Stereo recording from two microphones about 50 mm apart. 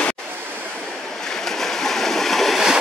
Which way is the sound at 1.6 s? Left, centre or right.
Centre.